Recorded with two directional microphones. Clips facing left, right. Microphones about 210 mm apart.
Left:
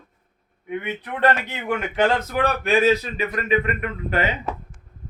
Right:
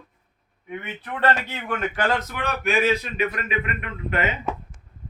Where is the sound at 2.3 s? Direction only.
35° left (ahead or behind).